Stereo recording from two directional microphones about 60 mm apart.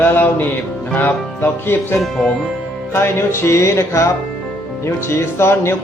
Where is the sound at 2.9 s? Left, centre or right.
Left.